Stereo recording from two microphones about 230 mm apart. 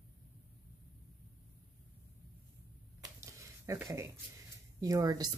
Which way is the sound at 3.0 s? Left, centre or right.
Centre.